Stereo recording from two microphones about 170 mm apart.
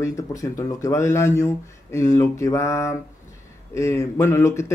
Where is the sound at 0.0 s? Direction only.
20° left (ahead or behind).